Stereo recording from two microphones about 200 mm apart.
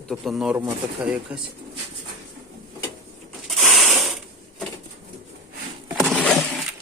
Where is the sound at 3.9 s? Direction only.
Centre (ahead or behind).